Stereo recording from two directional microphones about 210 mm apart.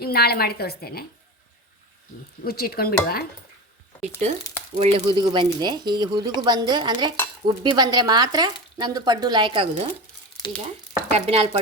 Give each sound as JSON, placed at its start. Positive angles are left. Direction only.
{"t": 0.0, "sound": "a woman's voice", "side_deg": 50}
{"t": 2.4, "sound": "a woman's voice", "side_deg": 45}
{"t": 4.2, "sound": "speech", "side_deg": -35}
{"t": 5.0, "sound": "speech", "side_deg": -20}
{"t": 11.1, "sound": "speech", "side_deg": -30}